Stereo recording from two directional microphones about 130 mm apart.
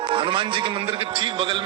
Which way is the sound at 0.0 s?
40° right (ahead or behind).